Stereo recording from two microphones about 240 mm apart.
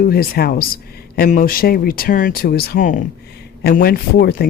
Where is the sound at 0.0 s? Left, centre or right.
Left.